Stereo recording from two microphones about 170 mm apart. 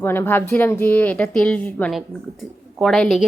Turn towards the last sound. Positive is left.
turn(degrees=0)  # may be behind; listen again after turning